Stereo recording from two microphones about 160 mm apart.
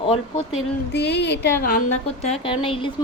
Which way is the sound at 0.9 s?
90° left.